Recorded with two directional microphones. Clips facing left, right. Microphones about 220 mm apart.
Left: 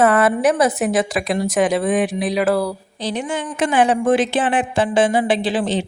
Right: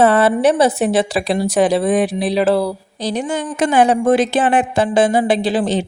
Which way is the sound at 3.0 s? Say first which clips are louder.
Right 3 dB; 40° right (ahead or behind).